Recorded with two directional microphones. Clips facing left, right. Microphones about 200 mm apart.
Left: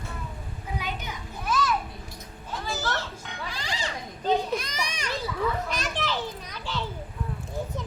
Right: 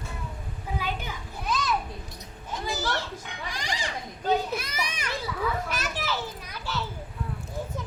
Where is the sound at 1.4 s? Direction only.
20° right (ahead or behind).